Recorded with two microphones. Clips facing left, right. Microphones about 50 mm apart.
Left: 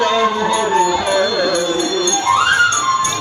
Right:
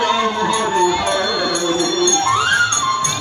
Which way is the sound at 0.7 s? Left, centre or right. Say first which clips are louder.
Left 1 dB; centre.